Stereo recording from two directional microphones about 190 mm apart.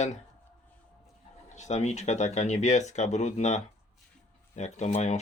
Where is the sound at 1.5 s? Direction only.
40° left (ahead or behind).